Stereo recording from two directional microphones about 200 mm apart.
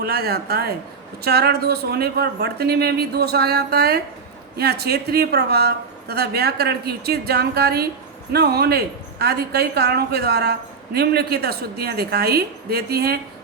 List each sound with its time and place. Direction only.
0.0 s a woman's voice: 50° right (ahead or behind)